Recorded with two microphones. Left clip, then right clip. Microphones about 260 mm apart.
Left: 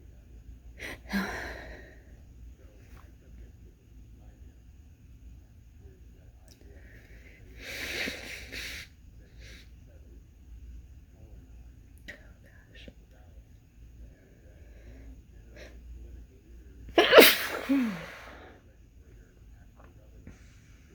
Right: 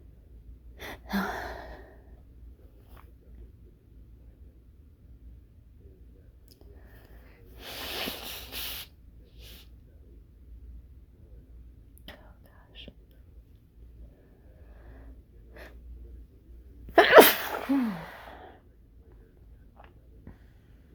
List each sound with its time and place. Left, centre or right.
0.8 s gasp: centre
7.6 s sanding: centre
16.9 s sneeze: centre